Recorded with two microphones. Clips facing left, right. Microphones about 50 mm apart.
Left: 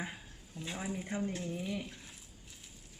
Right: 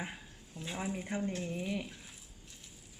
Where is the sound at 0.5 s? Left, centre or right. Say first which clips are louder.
Right 1 dB; centre.